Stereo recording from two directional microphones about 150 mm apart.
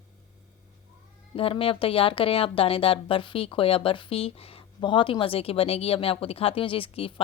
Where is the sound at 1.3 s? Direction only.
40° left (ahead or behind).